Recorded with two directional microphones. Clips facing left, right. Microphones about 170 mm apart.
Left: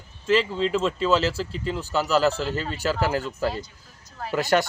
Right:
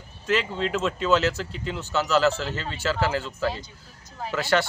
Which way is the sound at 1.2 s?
30° left (ahead or behind).